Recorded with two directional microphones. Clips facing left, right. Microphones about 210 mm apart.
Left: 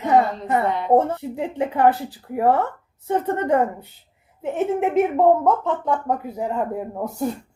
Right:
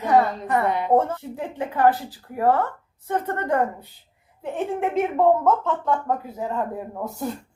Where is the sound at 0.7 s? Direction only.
10° right (ahead or behind).